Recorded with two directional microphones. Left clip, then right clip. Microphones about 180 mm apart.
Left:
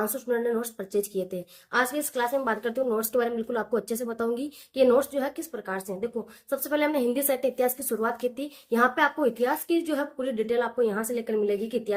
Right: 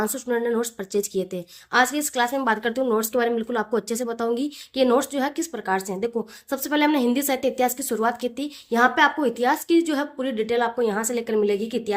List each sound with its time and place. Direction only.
0.0 s a woman's voice: 45° right (ahead or behind)